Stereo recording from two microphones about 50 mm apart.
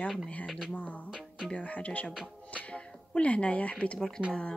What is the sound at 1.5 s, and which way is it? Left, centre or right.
Speech, left.